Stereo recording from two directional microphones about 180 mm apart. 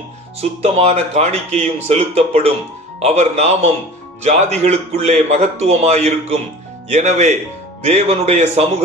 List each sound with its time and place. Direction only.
0.4 s speech: 35° right (ahead or behind)